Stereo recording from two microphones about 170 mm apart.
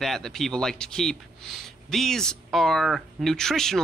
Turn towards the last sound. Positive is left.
turn(degrees=5)  # may be behind; listen again after turning